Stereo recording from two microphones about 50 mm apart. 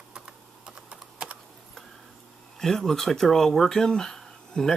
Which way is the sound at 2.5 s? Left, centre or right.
Centre.